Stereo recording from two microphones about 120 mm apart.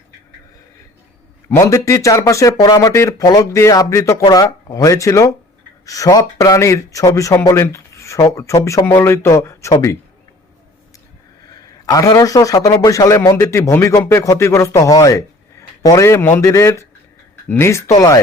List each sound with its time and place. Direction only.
1.5 s speech: 25° left (ahead or behind)
11.9 s speech: 30° left (ahead or behind)